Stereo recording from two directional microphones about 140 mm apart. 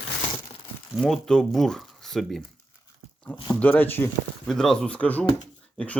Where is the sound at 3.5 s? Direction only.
10° left (ahead or behind).